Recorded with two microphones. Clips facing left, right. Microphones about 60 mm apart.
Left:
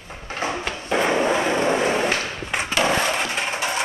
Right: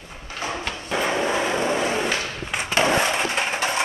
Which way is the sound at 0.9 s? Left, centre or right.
Centre.